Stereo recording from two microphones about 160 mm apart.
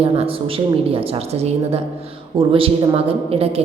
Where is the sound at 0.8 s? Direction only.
40° right (ahead or behind).